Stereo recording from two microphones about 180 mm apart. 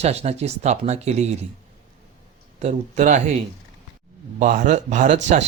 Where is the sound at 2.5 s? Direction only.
40° right (ahead or behind).